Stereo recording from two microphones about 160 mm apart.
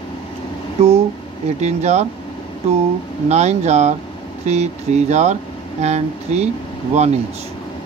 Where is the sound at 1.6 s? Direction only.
45° right (ahead or behind).